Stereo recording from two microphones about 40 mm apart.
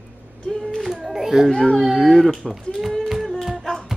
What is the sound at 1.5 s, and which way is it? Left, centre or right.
Speech, left.